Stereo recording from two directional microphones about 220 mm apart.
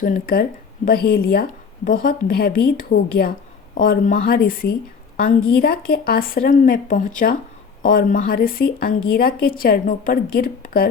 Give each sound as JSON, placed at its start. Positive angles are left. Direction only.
{"t": 0.0, "sound": "a woman's voice", "side_deg": 40}